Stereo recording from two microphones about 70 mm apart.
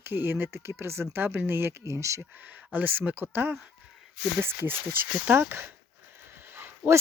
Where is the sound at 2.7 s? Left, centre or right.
Right.